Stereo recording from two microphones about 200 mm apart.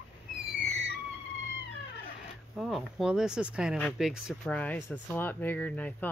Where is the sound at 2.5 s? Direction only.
Centre (ahead or behind).